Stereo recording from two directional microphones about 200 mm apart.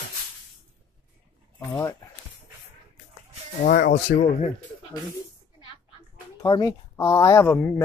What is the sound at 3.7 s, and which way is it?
Speech, 45° left (ahead or behind).